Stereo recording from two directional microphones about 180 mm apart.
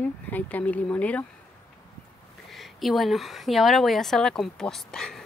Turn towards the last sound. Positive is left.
turn(degrees=5)  # may be behind; listen again after turning